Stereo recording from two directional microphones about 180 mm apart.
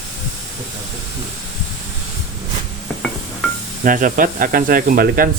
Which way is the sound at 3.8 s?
50° right (ahead or behind).